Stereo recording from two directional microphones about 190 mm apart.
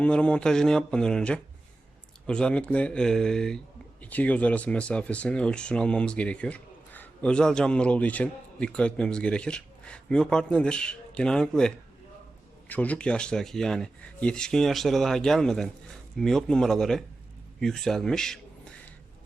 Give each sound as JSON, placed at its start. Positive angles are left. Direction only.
{"t": 0.0, "sound": "a man's voice", "side_deg": 5}